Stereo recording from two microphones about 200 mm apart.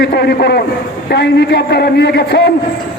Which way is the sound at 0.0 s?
55° left (ahead or behind).